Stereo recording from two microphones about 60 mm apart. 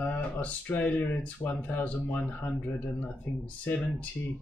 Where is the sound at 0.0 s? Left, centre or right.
Left.